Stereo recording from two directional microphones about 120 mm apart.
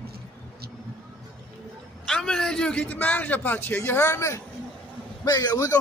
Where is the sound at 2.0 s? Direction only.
5° left (ahead or behind).